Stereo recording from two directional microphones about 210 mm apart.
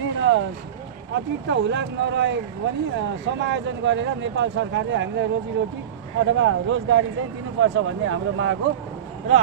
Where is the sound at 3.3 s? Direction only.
60° right (ahead or behind).